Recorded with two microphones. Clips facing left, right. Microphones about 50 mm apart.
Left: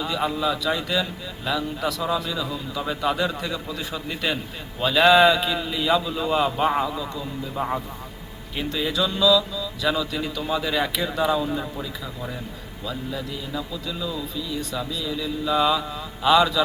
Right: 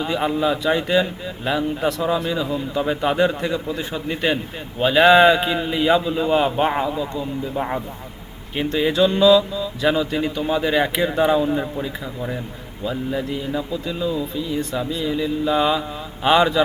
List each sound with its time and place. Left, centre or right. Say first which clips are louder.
0.0 s speech: right 4 dB; right
12.8 s speech: right 6 dB; right